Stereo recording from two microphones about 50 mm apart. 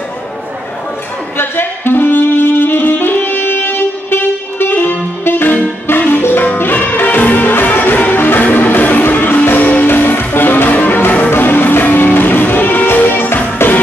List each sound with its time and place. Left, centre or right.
1.4 s music: left